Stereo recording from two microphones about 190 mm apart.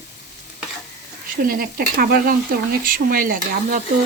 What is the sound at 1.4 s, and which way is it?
Speech, 50° right (ahead or behind).